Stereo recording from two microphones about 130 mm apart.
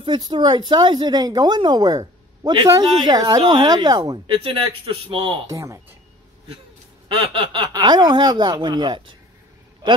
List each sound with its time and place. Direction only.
0.0 s speech: 35° right (ahead or behind)
4.4 s speech: 45° right (ahead or behind)
5.5 s speech: 25° right (ahead or behind)
7.1 s speech: 40° right (ahead or behind)